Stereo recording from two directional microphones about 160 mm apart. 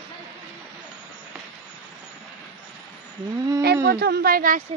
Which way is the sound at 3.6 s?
90° right.